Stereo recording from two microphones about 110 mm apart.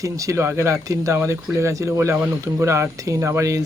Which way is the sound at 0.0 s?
30° right (ahead or behind).